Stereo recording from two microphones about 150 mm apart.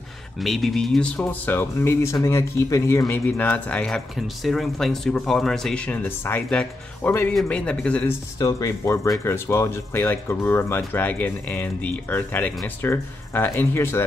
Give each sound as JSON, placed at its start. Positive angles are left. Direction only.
{"t": 0.4, "sound": "speech", "side_deg": 0}
{"t": 8.4, "sound": "speech", "side_deg": 20}